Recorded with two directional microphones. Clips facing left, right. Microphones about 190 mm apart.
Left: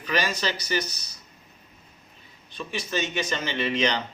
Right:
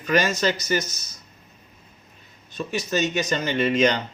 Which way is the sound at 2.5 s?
45° right (ahead or behind).